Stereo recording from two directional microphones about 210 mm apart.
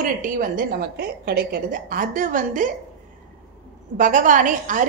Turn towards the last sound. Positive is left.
turn(degrees=-35)  # may be behind; listen again after turning